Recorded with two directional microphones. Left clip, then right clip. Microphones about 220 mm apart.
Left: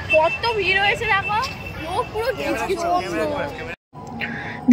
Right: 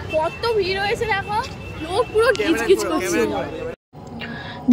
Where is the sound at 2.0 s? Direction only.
40° right (ahead or behind).